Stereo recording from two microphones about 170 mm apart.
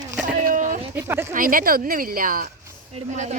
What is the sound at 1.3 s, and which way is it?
Speech, 55° right (ahead or behind).